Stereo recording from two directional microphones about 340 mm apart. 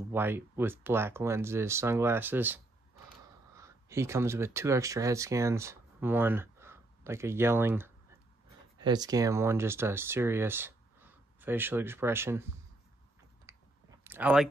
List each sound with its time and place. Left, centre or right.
0.1 s speech: centre
13.5 s clicking: centre